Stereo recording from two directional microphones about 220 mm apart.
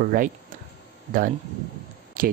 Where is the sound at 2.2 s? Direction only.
40° right (ahead or behind).